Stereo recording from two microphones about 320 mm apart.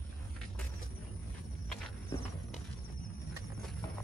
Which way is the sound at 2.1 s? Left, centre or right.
Centre.